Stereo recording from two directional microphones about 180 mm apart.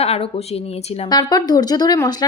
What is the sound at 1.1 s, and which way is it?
Speech, 20° left (ahead or behind).